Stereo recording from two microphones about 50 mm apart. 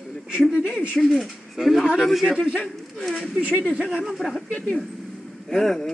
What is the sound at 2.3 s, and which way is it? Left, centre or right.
Speech, centre.